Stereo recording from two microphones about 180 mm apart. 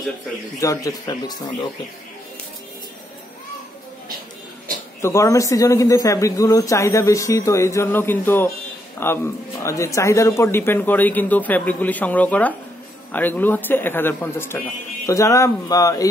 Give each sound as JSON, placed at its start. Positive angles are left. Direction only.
{"t": 0.6, "sound": "speech", "side_deg": 20}
{"t": 5.0, "sound": "a man's voice", "side_deg": 15}